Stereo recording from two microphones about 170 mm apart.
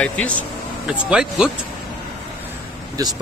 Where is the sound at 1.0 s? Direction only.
5° right (ahead or behind).